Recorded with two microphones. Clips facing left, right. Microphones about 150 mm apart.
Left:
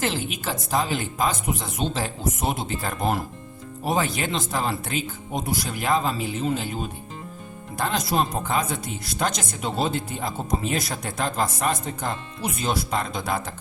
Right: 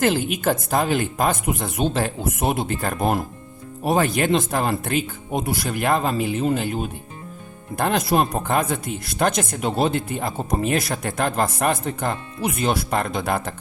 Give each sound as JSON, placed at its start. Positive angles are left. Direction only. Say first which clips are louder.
{"t": 0.0, "sound": "speech", "louder": "right 7 dB", "side_deg": -55}